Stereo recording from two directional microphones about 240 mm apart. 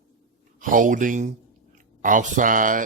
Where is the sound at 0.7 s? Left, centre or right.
Right.